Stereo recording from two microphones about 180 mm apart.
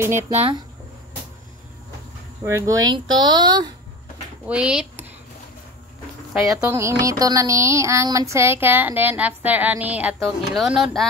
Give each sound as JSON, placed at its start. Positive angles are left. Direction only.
{"t": 0.0, "sound": "music", "side_deg": -15}
{"t": 0.3, "sound": "speech", "side_deg": -30}
{"t": 2.4, "sound": "speech", "side_deg": -15}
{"t": 4.5, "sound": "speech", "side_deg": -5}
{"t": 6.6, "sound": "music", "side_deg": -15}
{"t": 10.2, "sound": "speech", "side_deg": 0}